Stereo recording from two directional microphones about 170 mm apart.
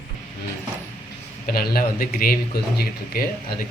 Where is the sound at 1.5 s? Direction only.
60° left (ahead or behind).